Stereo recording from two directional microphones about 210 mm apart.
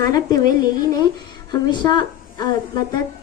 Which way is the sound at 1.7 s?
20° left (ahead or behind).